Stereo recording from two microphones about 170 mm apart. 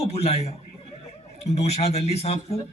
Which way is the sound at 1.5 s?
40° left (ahead or behind).